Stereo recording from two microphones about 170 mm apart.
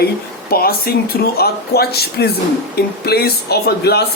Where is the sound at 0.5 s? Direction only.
65° left (ahead or behind).